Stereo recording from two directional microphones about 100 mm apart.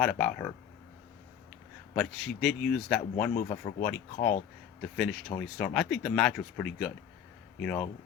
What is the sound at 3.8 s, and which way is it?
Speech, 20° left (ahead or behind).